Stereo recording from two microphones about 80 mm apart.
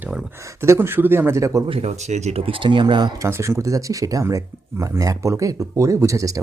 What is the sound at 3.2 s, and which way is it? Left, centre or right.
Speech, right.